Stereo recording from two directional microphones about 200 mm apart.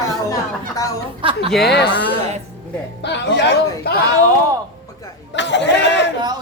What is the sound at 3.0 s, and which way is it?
Speech, 60° left (ahead or behind).